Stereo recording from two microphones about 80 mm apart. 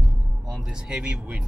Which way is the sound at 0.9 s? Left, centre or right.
Centre.